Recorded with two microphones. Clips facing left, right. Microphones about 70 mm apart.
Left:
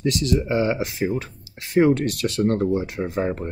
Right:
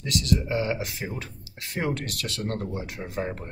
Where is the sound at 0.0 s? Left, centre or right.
Left.